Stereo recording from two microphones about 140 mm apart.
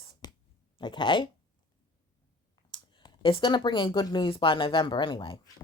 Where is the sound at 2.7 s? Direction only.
35° left (ahead or behind).